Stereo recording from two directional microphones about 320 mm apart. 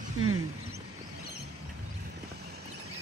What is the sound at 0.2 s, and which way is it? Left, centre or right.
Mouse, right.